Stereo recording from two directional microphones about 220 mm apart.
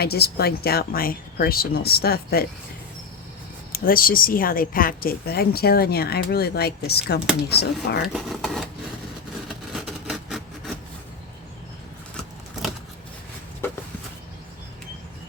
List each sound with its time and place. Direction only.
0.0 s speech: 45° left (ahead or behind)
3.7 s speech: 40° left (ahead or behind)
8.0 s speech: centre (ahead or behind)
9.5 s a sound: centre (ahead or behind)